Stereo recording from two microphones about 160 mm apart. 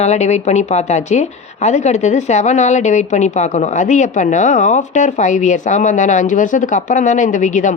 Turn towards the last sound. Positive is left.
turn(degrees=50)  # may be behind; listen again after turning